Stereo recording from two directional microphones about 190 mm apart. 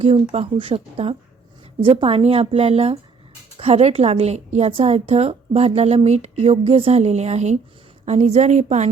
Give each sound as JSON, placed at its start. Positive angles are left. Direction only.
{"t": 0.0, "sound": "a woman's voice", "side_deg": -30}